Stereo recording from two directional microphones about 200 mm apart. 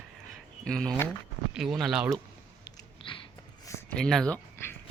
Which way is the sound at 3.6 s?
15° left (ahead or behind).